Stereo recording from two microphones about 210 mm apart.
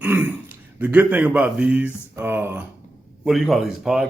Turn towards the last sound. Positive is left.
turn(degrees=-5)  # may be behind; listen again after turning